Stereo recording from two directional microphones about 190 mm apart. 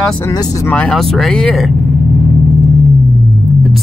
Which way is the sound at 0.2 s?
20° left (ahead or behind).